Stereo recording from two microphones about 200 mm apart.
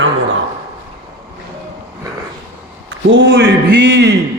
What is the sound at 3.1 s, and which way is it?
A man's voice, 65° right (ahead or behind).